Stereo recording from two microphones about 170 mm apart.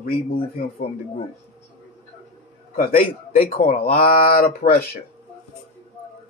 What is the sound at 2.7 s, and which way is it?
Speech, 60° left (ahead or behind).